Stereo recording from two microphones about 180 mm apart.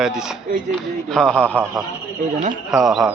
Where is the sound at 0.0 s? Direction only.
5° right (ahead or behind).